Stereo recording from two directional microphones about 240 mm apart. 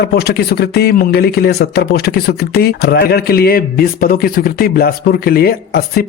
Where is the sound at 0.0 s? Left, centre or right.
Left.